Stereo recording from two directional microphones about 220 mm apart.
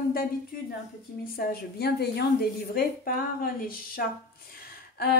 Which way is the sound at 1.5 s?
45° left (ahead or behind).